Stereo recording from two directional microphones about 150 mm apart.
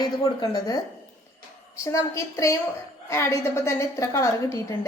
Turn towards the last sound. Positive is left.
turn(degrees=20)  # may be behind; listen again after turning